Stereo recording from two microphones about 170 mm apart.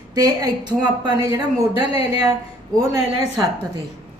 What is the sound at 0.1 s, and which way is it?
A woman's voice, 25° right (ahead or behind).